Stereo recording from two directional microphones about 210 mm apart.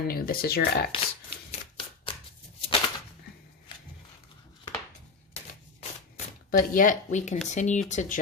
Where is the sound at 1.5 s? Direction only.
25° left (ahead or behind).